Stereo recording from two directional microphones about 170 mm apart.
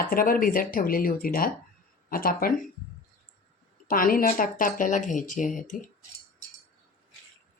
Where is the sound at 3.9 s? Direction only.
55° left (ahead or behind).